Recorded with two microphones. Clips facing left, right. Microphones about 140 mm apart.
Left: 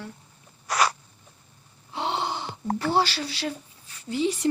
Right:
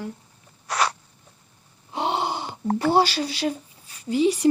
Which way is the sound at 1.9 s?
15° right (ahead or behind).